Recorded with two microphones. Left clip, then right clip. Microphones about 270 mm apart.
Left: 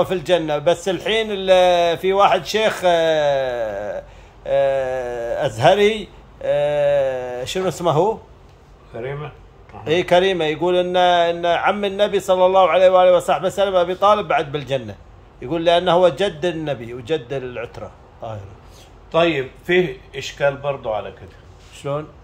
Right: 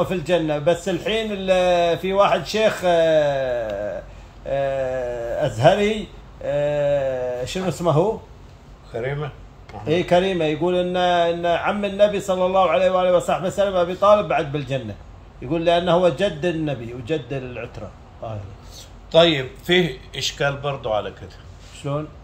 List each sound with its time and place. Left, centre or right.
0.0 s speech: centre
8.9 s speech: centre